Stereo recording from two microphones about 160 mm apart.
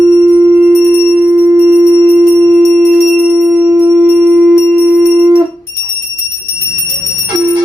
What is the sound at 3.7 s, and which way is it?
Music, 15° right (ahead or behind).